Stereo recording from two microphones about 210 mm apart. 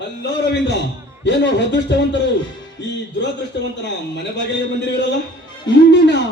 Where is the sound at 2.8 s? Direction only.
55° left (ahead or behind).